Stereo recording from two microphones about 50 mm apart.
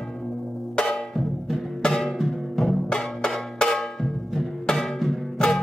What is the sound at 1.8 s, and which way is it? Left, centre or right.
Music, centre.